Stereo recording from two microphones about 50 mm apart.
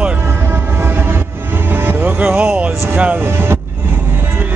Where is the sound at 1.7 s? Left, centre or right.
Right.